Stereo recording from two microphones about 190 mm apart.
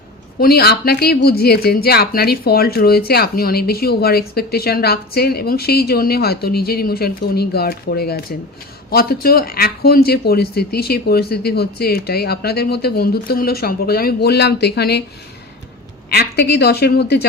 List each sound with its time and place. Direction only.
0.3 s speech: 55° left (ahead or behind)
16.0 s speech: 60° left (ahead or behind)